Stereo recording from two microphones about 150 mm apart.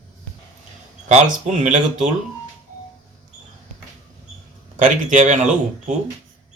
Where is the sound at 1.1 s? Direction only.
55° right (ahead or behind).